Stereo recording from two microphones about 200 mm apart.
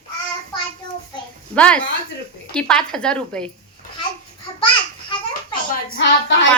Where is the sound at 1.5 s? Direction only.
5° left (ahead or behind).